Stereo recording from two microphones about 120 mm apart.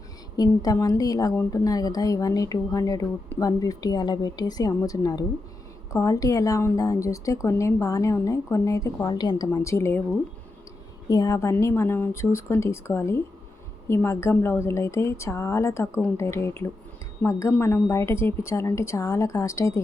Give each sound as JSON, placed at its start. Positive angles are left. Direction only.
{"t": 0.3, "sound": "a woman's voice", "side_deg": 30}
{"t": 11.1, "sound": "a woman's voice", "side_deg": 30}